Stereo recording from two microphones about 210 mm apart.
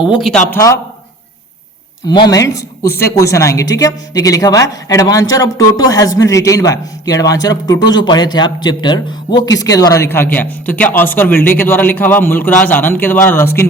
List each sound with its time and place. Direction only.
0.2 s speech: centre (ahead or behind)
0.5 s a woman's voice: 15° left (ahead or behind)
2.0 s a woman's voice: 20° left (ahead or behind)